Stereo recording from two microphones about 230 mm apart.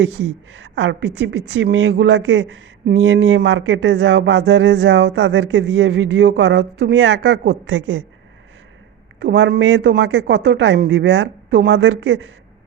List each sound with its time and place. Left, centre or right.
0.0 s a woman's voice: right
9.2 s a woman's voice: right